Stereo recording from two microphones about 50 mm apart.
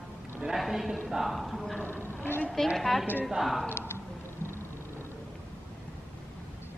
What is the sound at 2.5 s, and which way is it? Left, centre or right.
A woman's voice, centre.